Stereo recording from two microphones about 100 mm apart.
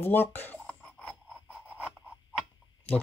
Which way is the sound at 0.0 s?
20° left (ahead or behind).